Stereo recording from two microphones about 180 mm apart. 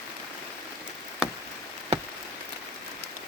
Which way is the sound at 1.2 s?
5° right (ahead or behind).